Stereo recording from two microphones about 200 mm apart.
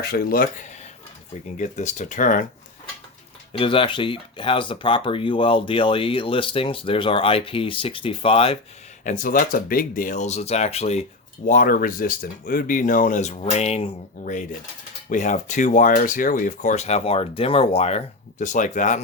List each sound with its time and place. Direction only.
0.0 s speech: 50° left (ahead or behind)
1.5 s speech: 35° left (ahead or behind)
3.6 s speech: 25° left (ahead or behind)
9.0 s speech: 40° left (ahead or behind)
11.4 s speech: 45° left (ahead or behind)